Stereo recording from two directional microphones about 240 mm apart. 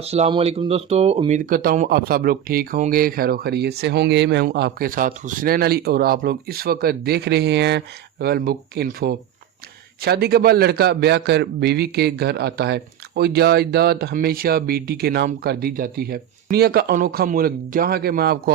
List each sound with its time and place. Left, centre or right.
0.0 s a man's voice: right